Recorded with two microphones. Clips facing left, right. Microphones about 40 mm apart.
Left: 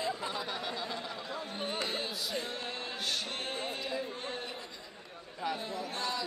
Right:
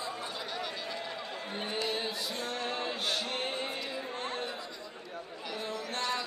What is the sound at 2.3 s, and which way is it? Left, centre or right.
Music, right.